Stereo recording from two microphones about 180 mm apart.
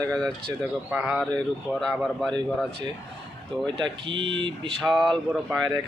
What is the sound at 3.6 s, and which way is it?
Speech, 25° right (ahead or behind).